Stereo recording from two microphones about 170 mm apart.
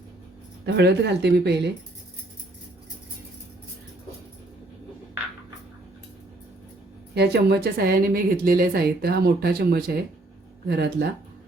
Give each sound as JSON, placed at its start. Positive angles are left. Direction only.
{"t": 0.6, "sound": "speech", "side_deg": -80}
{"t": 7.1, "sound": "a woman's voice", "side_deg": -75}